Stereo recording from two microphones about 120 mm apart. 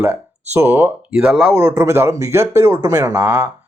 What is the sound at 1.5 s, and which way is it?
Speech, 25° right (ahead or behind).